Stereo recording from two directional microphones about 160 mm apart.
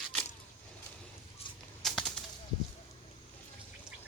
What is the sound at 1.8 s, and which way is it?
Bird, centre (ahead or behind).